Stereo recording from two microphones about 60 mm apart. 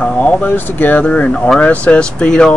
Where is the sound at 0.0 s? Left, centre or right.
Left.